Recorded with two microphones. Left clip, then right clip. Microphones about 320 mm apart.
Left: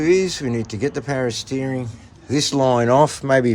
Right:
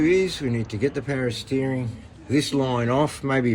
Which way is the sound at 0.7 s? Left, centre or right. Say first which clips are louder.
Left 2 dB; left.